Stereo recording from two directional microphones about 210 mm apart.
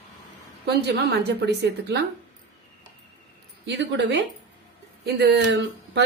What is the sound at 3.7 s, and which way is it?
Speech, 55° right (ahead or behind).